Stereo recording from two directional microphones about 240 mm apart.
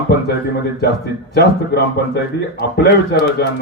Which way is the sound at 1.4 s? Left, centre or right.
Left.